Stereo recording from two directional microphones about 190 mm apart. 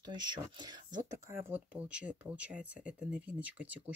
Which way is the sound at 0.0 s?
25° right (ahead or behind).